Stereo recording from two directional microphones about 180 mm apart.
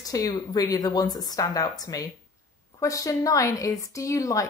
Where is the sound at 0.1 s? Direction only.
20° left (ahead or behind).